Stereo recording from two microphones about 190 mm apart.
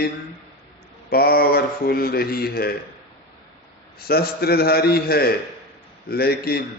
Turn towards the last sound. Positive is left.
turn(degrees=55)  # may be behind; listen again after turning